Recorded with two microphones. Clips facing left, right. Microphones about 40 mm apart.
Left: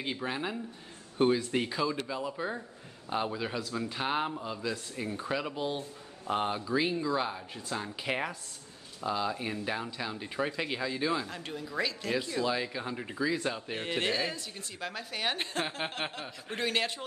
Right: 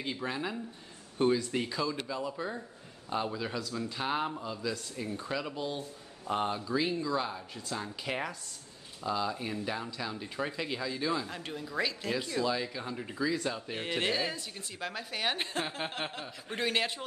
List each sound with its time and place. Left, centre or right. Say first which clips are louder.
0.2 s speech: left 1 dB; centre
11.2 s a woman's voice: even; centre
12.4 s speech: left 1 dB; centre
13.7 s a woman's voice: even; centre